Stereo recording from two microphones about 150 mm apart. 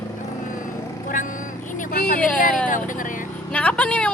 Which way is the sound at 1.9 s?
70° left (ahead or behind).